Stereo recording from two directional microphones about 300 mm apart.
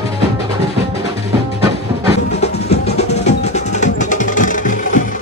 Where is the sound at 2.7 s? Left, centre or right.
Left.